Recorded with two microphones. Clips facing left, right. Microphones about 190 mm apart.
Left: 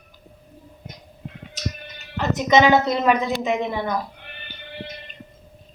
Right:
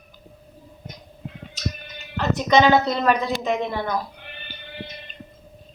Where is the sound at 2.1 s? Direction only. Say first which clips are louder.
Left 1 dB; 15° left (ahead or behind).